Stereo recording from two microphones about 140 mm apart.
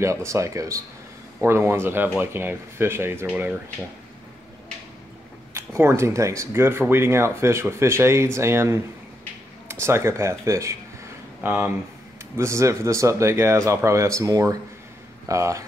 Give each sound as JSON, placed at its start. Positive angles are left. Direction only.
{"t": 0.0, "sound": "speech", "side_deg": -20}
{"t": 5.5, "sound": "speech", "side_deg": -20}